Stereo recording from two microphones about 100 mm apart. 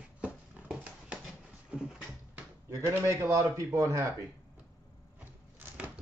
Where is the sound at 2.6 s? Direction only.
30° right (ahead or behind).